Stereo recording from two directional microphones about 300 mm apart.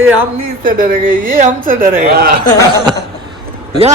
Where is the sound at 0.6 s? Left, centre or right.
Right.